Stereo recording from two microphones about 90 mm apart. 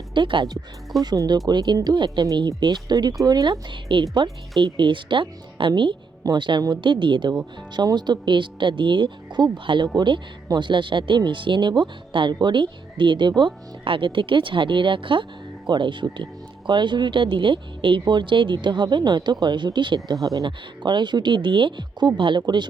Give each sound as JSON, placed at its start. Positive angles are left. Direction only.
{"t": 0.1, "sound": "speech", "side_deg": -65}
{"t": 1.0, "sound": "speech", "side_deg": -45}
{"t": 3.5, "sound": "speech", "side_deg": -65}
{"t": 20.2, "sound": "speech", "side_deg": -50}